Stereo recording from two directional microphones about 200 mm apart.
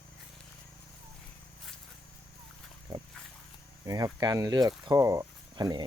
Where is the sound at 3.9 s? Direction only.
20° right (ahead or behind).